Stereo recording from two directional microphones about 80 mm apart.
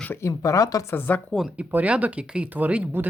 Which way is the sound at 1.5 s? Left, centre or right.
Centre.